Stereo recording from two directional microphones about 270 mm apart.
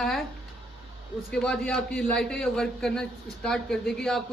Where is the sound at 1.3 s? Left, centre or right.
Centre.